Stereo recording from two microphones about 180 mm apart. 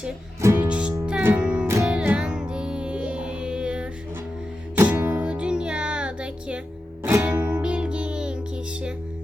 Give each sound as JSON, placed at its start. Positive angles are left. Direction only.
{"t": 0.0, "sound": "music", "side_deg": -10}